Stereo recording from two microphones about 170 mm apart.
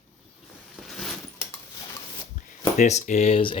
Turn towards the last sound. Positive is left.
turn(degrees=35)  # may be behind; listen again after turning